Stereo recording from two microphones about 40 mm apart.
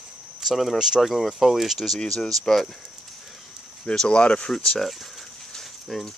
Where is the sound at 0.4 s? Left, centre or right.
Centre.